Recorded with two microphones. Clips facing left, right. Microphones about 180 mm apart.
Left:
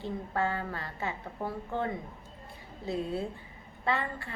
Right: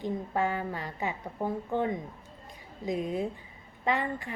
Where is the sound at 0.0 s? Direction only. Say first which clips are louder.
Right 2 dB; 15° right (ahead or behind).